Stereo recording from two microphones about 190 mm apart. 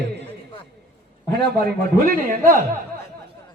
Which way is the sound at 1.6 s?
50° right (ahead or behind).